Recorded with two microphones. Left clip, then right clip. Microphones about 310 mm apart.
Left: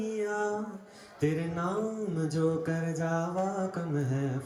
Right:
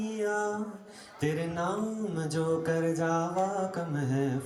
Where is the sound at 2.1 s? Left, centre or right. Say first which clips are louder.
Even; centre.